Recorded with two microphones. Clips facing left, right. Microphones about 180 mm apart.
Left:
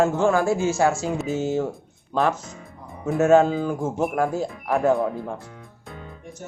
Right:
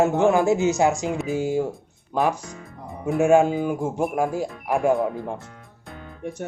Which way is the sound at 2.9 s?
Centre (ahead or behind).